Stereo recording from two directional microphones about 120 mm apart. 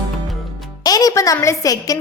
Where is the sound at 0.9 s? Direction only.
30° left (ahead or behind).